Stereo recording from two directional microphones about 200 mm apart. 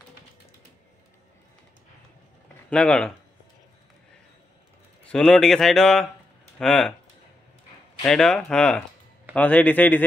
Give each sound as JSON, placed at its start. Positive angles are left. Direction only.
{"t": 2.7, "sound": "speech", "side_deg": 5}
{"t": 5.1, "sound": "speech", "side_deg": 5}
{"t": 8.0, "sound": "a man's voice", "side_deg": 5}